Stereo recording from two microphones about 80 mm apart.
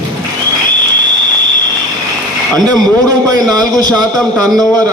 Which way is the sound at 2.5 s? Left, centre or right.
Right.